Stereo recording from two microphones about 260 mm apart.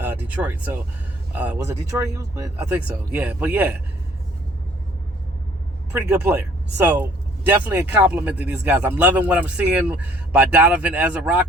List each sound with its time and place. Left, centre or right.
0.0 s speech: centre
5.9 s speech: centre